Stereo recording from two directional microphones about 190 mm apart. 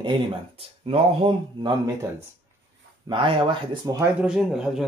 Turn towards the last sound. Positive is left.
turn(degrees=-5)  # may be behind; listen again after turning